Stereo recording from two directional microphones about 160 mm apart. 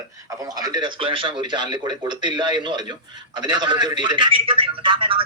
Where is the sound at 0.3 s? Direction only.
20° right (ahead or behind).